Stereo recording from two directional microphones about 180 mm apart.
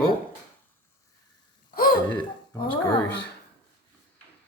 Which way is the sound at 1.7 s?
55° left (ahead or behind).